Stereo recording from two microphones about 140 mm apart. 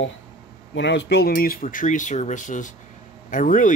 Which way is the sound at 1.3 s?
90° left.